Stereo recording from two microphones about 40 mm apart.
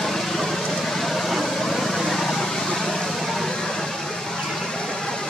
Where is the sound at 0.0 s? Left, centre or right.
Centre.